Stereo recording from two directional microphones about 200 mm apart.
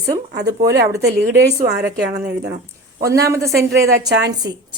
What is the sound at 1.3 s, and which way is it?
Speech, 55° right (ahead or behind).